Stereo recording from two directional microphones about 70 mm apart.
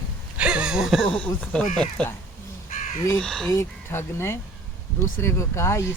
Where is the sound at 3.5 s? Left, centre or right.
Left.